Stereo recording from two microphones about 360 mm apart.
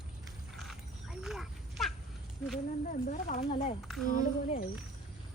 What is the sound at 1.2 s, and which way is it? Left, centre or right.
Roaring cats, centre.